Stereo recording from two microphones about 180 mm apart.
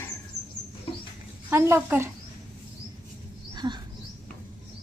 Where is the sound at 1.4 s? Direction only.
10° right (ahead or behind).